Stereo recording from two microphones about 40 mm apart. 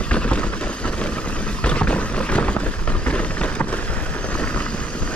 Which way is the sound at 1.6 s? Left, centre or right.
Left.